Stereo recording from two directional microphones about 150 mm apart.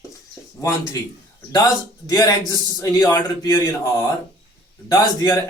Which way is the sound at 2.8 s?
20° left (ahead or behind).